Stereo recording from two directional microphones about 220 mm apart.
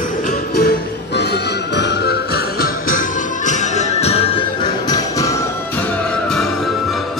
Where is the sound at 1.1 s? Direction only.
50° left (ahead or behind); by 5.3 s 20° left (ahead or behind).